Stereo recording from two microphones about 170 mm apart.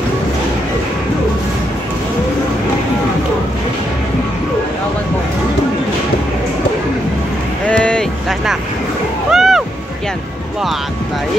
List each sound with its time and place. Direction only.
7.6 s vehicle: 5° left (ahead or behind)
9.3 s music: centre (ahead or behind)